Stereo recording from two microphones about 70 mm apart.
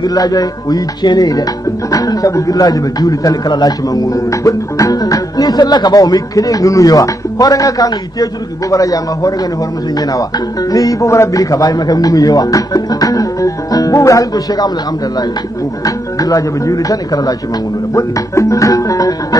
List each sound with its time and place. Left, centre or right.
0.0 s a man's voice: left
1.9 s a man's voice: left
10.7 s a man's voice: left
15.8 s a man's voice: left
17.9 s speech: left